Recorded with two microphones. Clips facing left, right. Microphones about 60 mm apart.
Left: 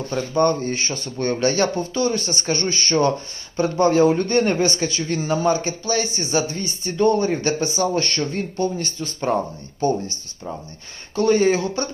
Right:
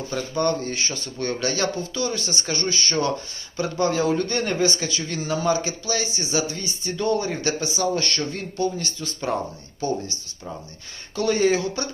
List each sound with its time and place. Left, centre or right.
0.3 s a man's voice: left
4.1 s a man's voice: left
4.4 s a man's voice: left
11.1 s a man's voice: left